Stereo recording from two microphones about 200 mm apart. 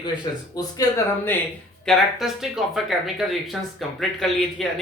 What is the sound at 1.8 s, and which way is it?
Speech, centre (ahead or behind).